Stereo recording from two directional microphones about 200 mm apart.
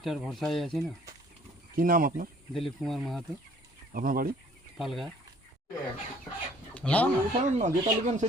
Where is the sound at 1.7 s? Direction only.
45° right (ahead or behind).